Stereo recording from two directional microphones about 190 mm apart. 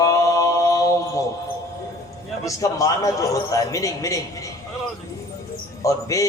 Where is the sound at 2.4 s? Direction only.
15° left (ahead or behind).